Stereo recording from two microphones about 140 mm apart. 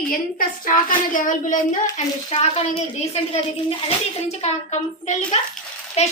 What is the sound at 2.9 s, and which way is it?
Speech, 50° left (ahead or behind).